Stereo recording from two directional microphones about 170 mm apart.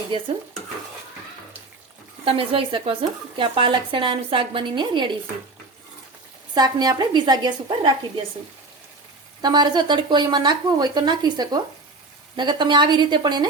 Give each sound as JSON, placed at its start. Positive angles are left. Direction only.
{"t": 0.1, "sound": "speech", "side_deg": -30}
{"t": 2.2, "sound": "speech", "side_deg": -35}
{"t": 6.5, "sound": "speech", "side_deg": -25}
{"t": 9.4, "sound": "speech", "side_deg": -25}